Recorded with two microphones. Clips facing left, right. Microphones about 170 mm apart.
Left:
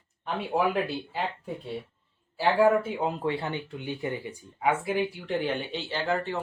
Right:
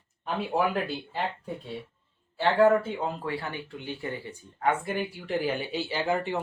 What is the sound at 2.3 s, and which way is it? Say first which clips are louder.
Speech: right 1 dB; 5° left (ahead or behind).